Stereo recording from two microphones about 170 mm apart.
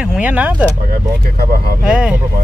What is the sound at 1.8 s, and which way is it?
Speech, 5° right (ahead or behind).